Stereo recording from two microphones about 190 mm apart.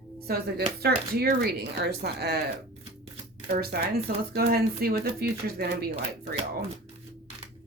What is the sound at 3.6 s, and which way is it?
Speech, 55° right (ahead or behind).